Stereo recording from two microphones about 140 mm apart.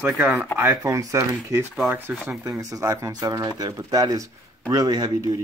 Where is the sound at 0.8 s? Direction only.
20° right (ahead or behind).